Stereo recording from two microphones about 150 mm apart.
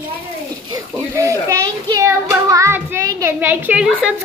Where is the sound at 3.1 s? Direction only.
20° right (ahead or behind).